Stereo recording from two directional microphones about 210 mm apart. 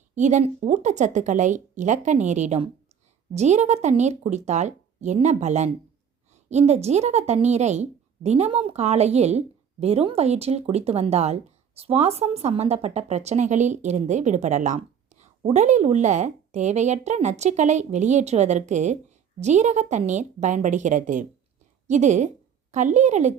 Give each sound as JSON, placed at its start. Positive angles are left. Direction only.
{"t": 0.2, "sound": "speech", "side_deg": -35}